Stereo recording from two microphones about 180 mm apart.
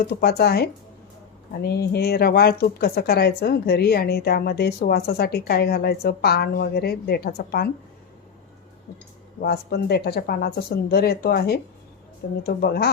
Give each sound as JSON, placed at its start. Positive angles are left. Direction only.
{"t": 0.0, "sound": "speech", "side_deg": 60}
{"t": 9.4, "sound": "speech", "side_deg": 60}